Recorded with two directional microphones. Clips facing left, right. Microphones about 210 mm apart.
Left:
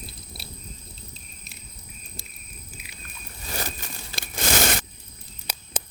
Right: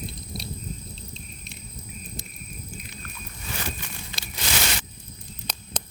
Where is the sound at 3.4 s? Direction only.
40° left (ahead or behind).